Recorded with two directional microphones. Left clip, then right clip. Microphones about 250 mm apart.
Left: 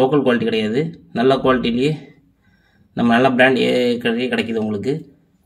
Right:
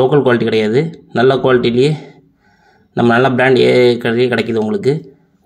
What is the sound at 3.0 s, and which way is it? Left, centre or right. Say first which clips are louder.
Speech: right 2 dB; centre.